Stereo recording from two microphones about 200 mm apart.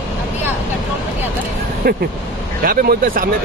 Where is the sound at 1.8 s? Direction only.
50° right (ahead or behind).